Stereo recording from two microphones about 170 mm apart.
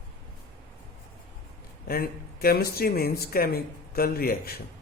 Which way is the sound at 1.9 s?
60° left (ahead or behind).